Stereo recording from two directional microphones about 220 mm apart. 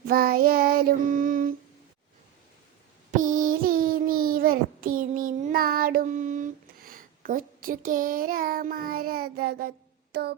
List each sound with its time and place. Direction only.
0.1 s child singing: 45° right (ahead or behind)
3.1 s child singing: 35° right (ahead or behind)